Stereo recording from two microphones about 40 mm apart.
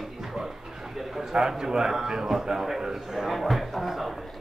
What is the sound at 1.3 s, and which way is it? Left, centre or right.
A man's voice, centre.